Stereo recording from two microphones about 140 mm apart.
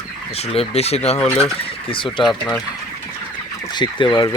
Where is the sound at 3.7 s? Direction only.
30° left (ahead or behind).